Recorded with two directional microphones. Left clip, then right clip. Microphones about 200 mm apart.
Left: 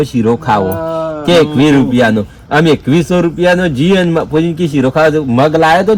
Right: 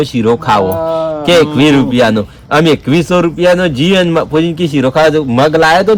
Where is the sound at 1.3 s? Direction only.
10° right (ahead or behind).